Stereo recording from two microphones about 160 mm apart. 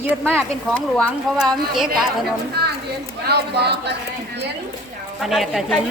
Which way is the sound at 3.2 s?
90° right.